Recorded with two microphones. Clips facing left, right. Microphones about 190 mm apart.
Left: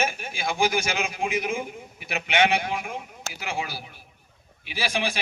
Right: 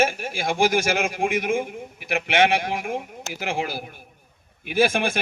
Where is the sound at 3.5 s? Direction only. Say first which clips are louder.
Right 4 dB; 50° right (ahead or behind).